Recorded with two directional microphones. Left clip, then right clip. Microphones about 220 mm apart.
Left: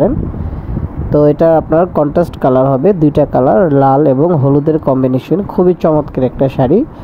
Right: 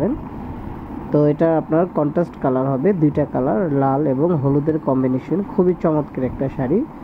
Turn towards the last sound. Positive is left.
turn(degrees=35)  # may be behind; listen again after turning